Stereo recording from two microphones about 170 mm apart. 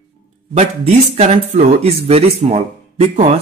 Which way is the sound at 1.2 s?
40° right (ahead or behind).